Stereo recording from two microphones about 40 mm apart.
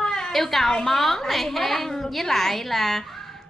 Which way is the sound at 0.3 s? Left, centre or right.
Centre.